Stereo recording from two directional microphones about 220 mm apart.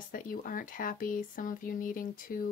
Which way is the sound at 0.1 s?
40° left (ahead or behind).